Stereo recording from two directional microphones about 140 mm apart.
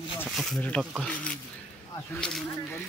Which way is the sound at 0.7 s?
10° left (ahead or behind).